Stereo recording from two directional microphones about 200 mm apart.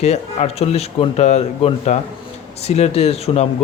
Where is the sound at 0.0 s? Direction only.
35° left (ahead or behind).